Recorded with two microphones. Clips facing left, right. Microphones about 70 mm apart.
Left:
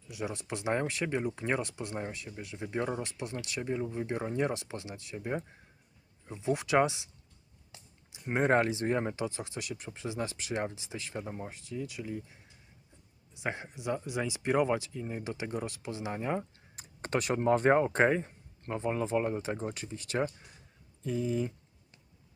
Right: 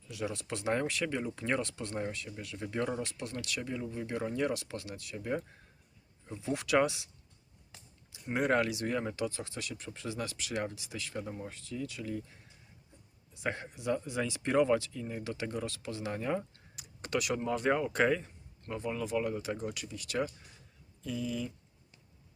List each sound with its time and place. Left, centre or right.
0.1 s speech: left
8.1 s speech: left
16.7 s speech: left